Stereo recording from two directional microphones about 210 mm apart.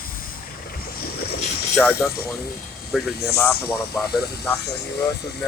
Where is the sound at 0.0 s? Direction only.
45° left (ahead or behind).